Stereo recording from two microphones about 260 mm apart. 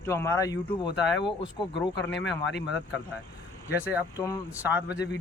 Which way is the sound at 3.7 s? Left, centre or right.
Centre.